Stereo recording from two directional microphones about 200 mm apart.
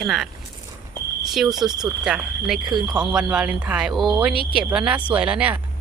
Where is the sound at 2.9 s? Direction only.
5° right (ahead or behind).